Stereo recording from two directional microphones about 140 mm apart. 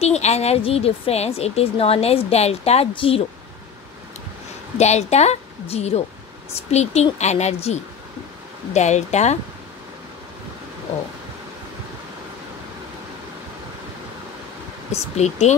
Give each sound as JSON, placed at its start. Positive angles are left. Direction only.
{"t": 0.0, "sound": "a woman's voice", "side_deg": 50}
{"t": 4.7, "sound": "a woman's voice", "side_deg": 50}
{"t": 15.1, "sound": "a woman's voice", "side_deg": 50}